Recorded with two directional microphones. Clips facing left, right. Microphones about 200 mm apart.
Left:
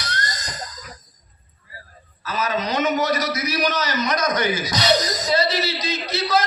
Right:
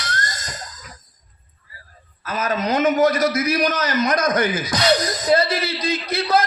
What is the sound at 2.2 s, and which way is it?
A man's voice, 50° right (ahead or behind).